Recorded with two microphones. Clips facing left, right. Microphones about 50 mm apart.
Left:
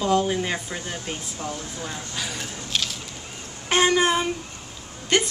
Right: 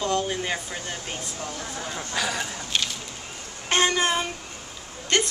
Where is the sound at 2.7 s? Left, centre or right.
Centre.